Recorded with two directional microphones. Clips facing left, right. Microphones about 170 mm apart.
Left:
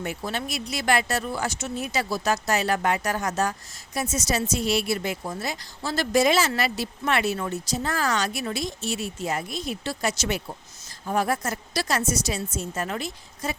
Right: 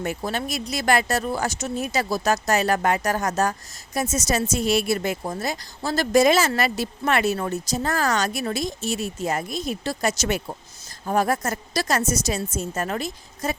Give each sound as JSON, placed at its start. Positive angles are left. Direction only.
{"t": 0.0, "sound": "a woman's voice", "side_deg": -45}